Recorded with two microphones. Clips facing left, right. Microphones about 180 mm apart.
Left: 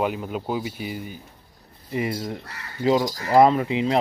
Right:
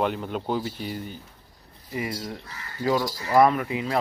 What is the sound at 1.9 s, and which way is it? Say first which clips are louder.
Speech: left 4 dB; 25° left (ahead or behind).